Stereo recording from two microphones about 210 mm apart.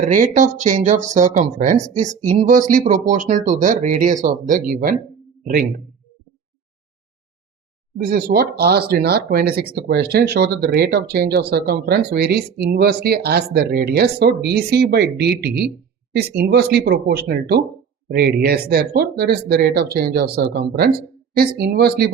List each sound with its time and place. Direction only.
0.0 s speech: 35° right (ahead or behind)
7.9 s speech: 45° right (ahead or behind)